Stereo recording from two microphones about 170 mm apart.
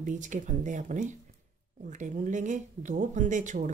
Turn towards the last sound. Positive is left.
turn(degrees=-45)  # may be behind; listen again after turning